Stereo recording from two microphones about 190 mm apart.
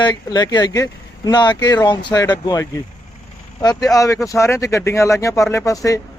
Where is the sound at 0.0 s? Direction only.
20° left (ahead or behind).